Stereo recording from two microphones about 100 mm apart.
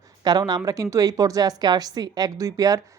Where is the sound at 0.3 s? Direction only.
45° right (ahead or behind).